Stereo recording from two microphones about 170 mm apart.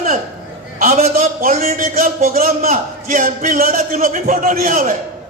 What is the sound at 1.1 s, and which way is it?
A man's voice, 55° right (ahead or behind).